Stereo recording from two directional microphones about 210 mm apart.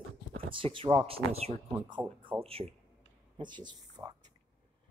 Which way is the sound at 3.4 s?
20° right (ahead or behind).